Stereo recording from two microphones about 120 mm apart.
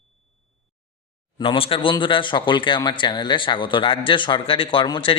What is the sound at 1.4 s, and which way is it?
Speech, 50° left (ahead or behind).